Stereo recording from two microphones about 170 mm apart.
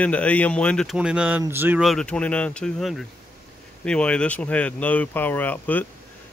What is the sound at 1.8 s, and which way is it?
Speech, 5° left (ahead or behind).